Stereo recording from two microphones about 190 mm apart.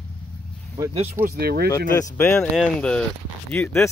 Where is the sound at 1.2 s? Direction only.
55° right (ahead or behind).